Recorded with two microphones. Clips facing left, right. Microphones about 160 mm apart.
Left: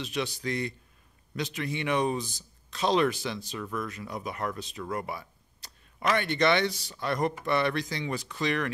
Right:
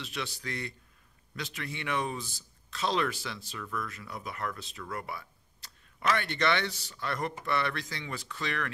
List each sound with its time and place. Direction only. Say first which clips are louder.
0.0 s speech: left 7 dB; 15° left (ahead or behind)